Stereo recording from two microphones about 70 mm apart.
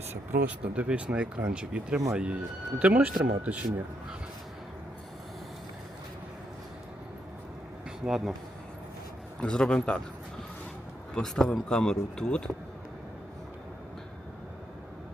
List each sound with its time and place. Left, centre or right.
0.3 s speech: centre
7.9 s speech: centre
9.4 s speech: centre
11.1 s speech: centre